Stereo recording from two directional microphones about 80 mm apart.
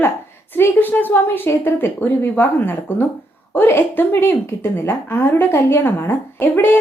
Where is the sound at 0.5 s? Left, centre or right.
Left.